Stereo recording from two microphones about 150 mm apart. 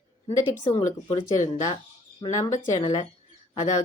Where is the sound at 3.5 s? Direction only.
55° left (ahead or behind).